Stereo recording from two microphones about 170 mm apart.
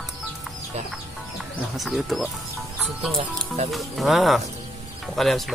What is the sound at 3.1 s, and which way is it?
Speech, 40° right (ahead or behind).